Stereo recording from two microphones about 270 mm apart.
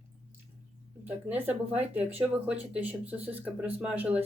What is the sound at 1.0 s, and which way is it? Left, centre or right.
Speech, centre.